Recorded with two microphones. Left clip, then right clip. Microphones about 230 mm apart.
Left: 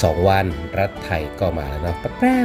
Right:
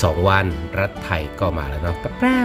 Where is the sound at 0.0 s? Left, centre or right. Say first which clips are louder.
Left 1 dB; centre.